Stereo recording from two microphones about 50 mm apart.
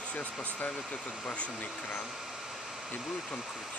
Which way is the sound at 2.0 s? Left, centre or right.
Centre.